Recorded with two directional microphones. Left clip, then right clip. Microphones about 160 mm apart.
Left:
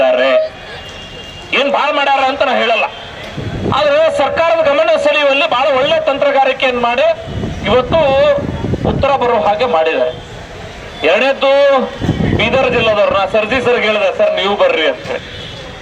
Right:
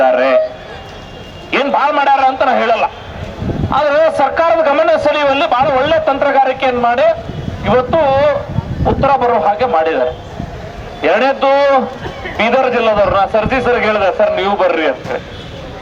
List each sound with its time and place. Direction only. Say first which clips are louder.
0.0 s vehicle: even; 20° left (ahead or behind)
1.5 s a sound: even; 20° left (ahead or behind)
3.7 s vehicle: even; 20° left (ahead or behind)
4.2 s a man's voice: even; 20° left (ahead or behind)